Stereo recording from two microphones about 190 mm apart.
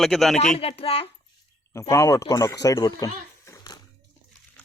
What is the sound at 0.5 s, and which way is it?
Speech, 30° left (ahead or behind).